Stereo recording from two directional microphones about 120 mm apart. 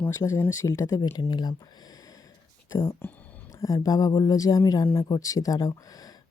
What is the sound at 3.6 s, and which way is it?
Speech, 30° left (ahead or behind).